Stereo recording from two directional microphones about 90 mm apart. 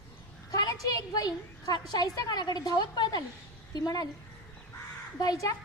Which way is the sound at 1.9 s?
50° left (ahead or behind).